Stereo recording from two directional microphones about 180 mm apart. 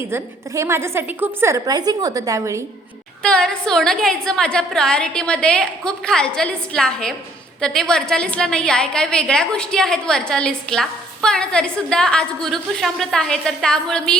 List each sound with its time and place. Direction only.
0.1 s a woman's voice: 15° right (ahead or behind)
3.2 s a woman's voice: 5° left (ahead or behind)